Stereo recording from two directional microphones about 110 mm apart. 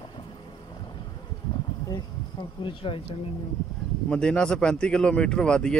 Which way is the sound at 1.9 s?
45° left (ahead or behind).